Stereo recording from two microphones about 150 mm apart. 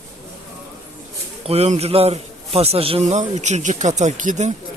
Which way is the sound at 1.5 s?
45° right (ahead or behind).